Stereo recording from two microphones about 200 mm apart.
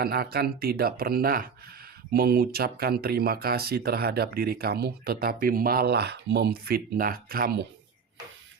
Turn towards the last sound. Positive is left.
turn(degrees=-50)  # may be behind; listen again after turning